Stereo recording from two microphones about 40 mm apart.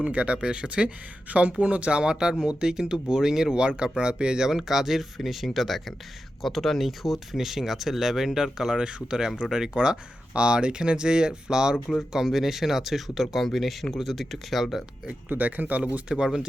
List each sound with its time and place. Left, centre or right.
0.0 s speech: right; by 3.6 s centre
3.6 s speech: right
12.1 s speech: centre
15.3 s speech: right
15.8 s speech: centre